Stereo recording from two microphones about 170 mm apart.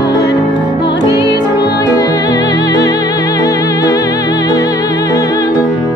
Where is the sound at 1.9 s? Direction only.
20° left (ahead or behind).